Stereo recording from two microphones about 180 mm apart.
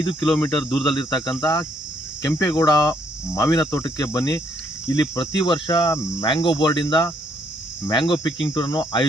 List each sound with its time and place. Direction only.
0.2 s speech: 5° left (ahead or behind)
0.9 s cricket: 20° left (ahead or behind)